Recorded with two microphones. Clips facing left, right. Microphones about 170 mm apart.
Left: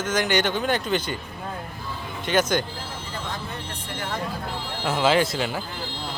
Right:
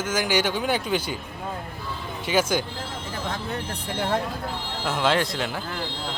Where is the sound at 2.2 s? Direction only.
10° right (ahead or behind).